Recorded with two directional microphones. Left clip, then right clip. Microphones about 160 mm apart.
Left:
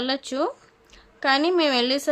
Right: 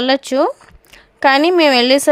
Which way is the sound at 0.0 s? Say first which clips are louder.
Right 11 dB; 50° right (ahead or behind).